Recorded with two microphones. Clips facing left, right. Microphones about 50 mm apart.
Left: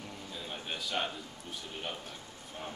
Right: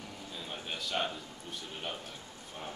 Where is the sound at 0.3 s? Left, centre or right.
Centre.